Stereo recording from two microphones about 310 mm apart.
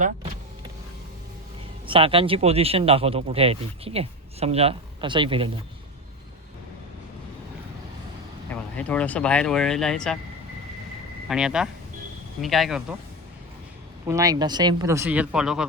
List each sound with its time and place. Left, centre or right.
1.9 s speech: centre
8.7 s speech: centre
11.3 s speech: centre
14.1 s speech: centre